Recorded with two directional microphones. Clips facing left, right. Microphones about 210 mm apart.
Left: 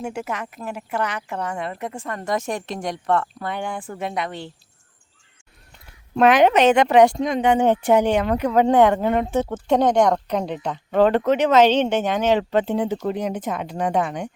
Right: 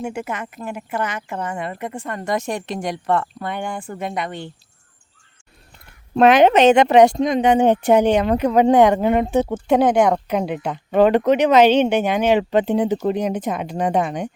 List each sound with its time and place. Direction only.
0.0 s speech: centre (ahead or behind)
6.1 s speech: 25° right (ahead or behind)